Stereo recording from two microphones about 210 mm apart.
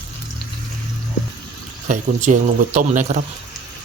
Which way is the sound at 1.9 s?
35° right (ahead or behind).